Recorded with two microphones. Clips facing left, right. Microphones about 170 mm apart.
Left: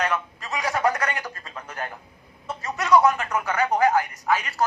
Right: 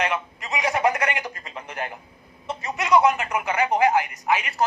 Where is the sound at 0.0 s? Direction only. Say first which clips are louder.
Even; 20° right (ahead or behind).